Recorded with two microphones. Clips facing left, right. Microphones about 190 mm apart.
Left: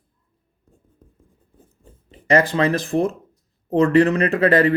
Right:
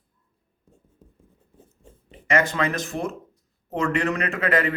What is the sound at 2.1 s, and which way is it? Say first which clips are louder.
Speech: left 5 dB; 35° left (ahead or behind).